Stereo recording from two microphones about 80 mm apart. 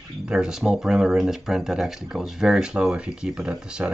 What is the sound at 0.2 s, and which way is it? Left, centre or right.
Speech, centre.